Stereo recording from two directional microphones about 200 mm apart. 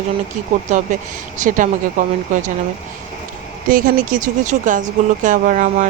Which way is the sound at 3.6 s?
45° right (ahead or behind).